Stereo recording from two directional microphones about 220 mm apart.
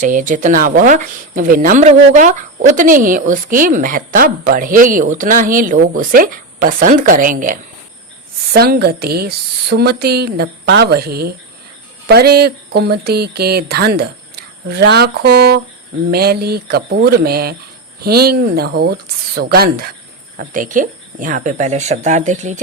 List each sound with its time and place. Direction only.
0.0 s a woman's voice: 35° right (ahead or behind)